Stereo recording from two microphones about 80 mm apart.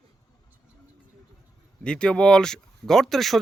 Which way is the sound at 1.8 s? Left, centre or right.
Centre.